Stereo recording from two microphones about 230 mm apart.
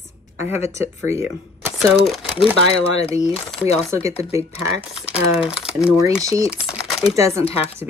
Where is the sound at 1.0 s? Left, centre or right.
Centre.